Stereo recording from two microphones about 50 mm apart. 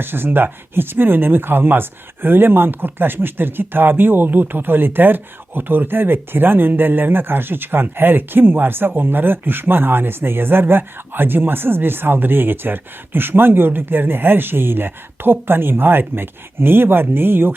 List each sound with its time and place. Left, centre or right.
0.0 s speech: right